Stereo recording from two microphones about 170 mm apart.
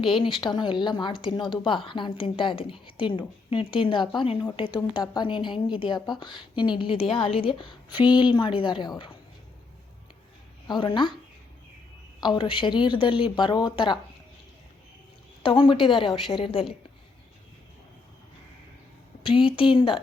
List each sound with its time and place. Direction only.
0.0 s speech: 30° left (ahead or behind)
10.7 s speech: 25° left (ahead or behind)
12.2 s speech: 30° left (ahead or behind)
15.4 s a woman's voice: 30° left (ahead or behind)
19.2 s a woman's voice: 30° left (ahead or behind)